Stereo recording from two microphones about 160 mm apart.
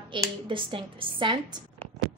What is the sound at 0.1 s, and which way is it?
Speech, 30° right (ahead or behind).